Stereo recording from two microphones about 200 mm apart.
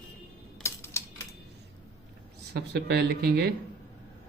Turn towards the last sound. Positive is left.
turn(degrees=-55)  # may be behind; listen again after turning